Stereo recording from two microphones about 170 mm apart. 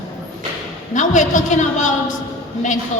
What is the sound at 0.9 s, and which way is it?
Speech, 45° left (ahead or behind).